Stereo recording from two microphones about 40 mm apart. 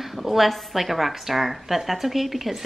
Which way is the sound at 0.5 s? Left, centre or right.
Centre.